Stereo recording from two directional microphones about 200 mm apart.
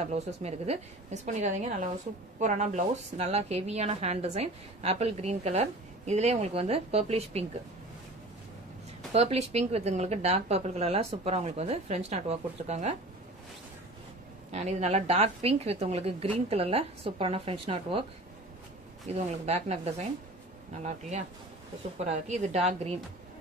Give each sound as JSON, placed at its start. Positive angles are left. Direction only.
{"t": 0.0, "sound": "a woman's voice", "side_deg": -30}
{"t": 9.1, "sound": "a woman's voice", "side_deg": -30}
{"t": 14.5, "sound": "a woman's voice", "side_deg": -35}
{"t": 19.0, "sound": "a woman's voice", "side_deg": -30}